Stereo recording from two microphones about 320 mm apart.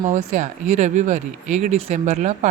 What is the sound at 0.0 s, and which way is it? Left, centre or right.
Speech, right.